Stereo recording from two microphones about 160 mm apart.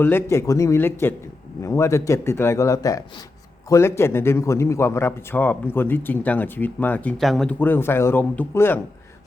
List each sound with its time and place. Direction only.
0.0 s a man's voice: 15° left (ahead or behind)